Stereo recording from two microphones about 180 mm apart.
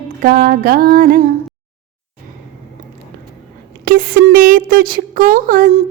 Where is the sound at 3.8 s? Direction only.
55° right (ahead or behind).